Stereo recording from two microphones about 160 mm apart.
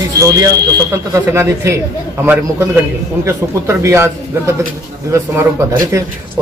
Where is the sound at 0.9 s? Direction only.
20° right (ahead or behind).